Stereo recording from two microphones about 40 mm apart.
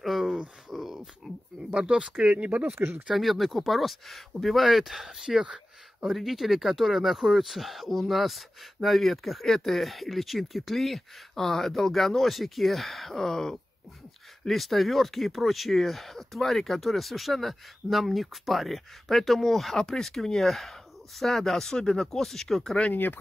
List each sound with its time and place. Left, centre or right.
0.0 s a sound: centre
1.7 s speech: right
2.9 s speech: centre
3.3 s speech: centre
5.4 s a sound: right
6.0 s speech: centre